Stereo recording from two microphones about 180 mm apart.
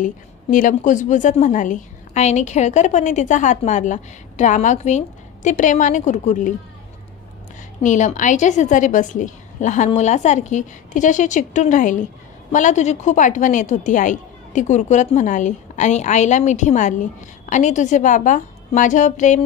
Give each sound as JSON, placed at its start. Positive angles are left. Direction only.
{"t": 0.0, "sound": "a woman's voice", "side_deg": 45}
{"t": 7.8, "sound": "a woman's voice", "side_deg": 45}